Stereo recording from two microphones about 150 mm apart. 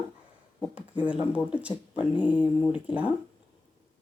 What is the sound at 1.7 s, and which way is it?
Speech, 30° left (ahead or behind).